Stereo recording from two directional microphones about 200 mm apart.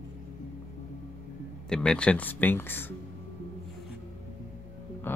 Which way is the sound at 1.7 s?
5° left (ahead or behind).